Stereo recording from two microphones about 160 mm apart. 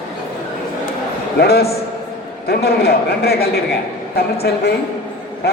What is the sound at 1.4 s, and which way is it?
A man's voice, 80° left.